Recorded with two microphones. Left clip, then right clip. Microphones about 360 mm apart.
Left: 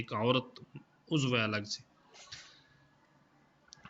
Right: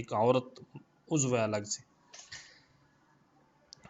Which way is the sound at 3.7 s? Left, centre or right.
Centre.